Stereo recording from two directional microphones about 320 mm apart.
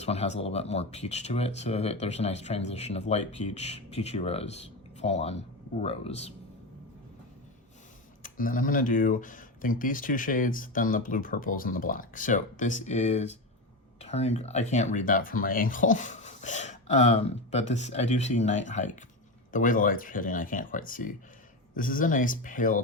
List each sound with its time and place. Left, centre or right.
0.0 s speech: centre
8.2 s speech: left